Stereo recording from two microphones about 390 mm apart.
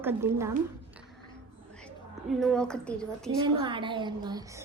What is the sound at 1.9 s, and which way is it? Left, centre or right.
A woman's voice, centre.